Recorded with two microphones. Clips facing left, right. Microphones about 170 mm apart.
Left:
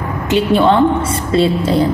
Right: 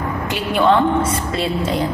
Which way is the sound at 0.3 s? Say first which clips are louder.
Left 5 dB; 30° left (ahead or behind).